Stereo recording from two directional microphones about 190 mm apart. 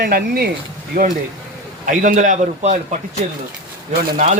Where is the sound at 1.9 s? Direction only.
40° right (ahead or behind).